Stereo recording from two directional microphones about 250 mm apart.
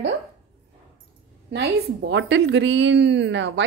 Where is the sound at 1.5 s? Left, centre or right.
Right.